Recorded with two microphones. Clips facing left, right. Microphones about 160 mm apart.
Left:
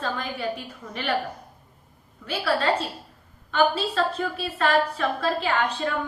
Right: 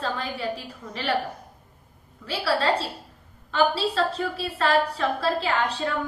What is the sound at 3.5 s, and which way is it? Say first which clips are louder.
A woman's voice: even; 35° right (ahead or behind).